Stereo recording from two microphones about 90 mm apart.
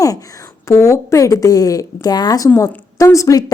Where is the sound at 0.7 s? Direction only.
35° left (ahead or behind).